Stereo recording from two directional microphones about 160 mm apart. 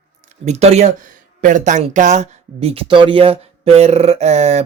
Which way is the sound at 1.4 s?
55° right (ahead or behind).